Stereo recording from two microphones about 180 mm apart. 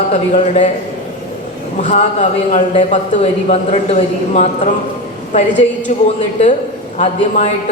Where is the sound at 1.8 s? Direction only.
40° left (ahead or behind).